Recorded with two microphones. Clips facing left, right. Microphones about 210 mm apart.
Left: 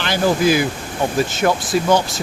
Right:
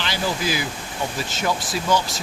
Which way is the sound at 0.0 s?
55° left (ahead or behind).